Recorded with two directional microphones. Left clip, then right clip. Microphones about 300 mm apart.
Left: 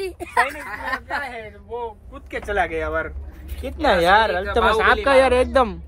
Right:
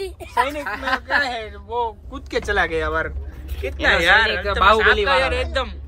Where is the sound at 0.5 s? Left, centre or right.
Centre.